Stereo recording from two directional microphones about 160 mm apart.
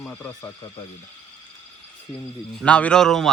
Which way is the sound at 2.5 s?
5° left (ahead or behind).